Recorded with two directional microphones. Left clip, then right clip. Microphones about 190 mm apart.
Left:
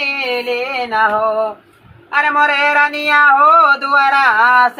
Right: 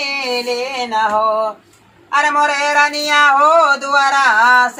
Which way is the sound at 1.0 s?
35° right (ahead or behind).